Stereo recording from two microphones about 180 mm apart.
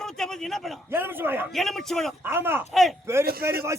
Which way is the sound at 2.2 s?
10° right (ahead or behind).